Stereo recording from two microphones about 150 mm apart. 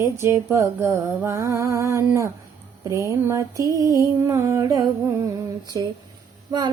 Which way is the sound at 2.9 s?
20° right (ahead or behind).